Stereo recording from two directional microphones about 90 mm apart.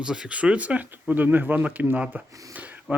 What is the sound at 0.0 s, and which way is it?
Speech, 10° right (ahead or behind).